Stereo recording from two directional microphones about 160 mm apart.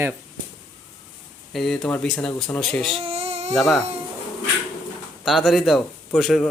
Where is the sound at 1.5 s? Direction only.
Centre (ahead or behind).